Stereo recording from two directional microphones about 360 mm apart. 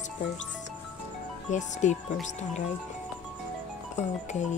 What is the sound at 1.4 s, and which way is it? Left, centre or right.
Speech, centre.